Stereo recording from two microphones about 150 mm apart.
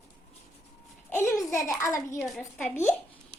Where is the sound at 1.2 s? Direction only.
20° left (ahead or behind).